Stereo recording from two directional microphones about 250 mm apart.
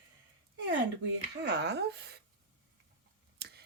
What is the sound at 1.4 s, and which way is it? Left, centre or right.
Speech, right.